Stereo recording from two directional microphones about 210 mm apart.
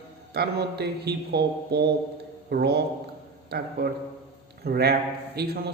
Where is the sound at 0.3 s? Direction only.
50° right (ahead or behind).